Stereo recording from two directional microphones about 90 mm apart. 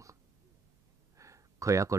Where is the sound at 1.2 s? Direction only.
35° right (ahead or behind).